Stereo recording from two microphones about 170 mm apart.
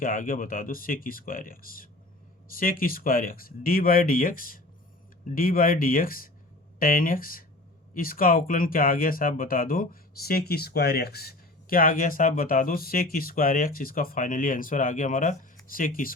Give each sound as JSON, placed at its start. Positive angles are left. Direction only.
{"t": 0.0, "sound": "speech", "side_deg": 55}